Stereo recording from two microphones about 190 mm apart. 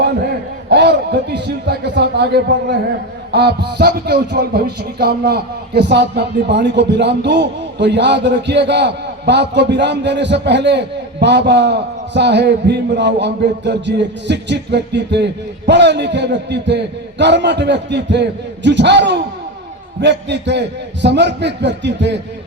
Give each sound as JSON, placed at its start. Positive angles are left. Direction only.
{"t": 0.0, "sound": "speech", "side_deg": -60}